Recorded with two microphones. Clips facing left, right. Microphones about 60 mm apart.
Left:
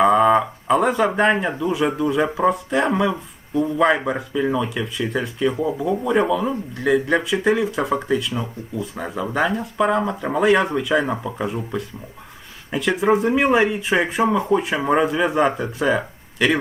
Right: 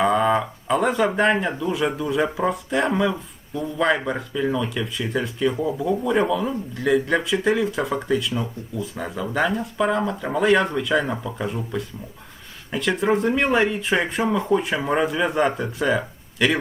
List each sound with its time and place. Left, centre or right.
0.0 s speech: centre
11.0 s speech: centre
11.3 s speech: centre
14.4 s speech: centre